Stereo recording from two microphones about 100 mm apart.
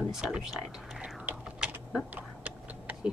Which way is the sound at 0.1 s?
5° right (ahead or behind).